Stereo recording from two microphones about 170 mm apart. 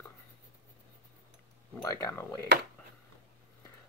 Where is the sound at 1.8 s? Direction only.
20° left (ahead or behind).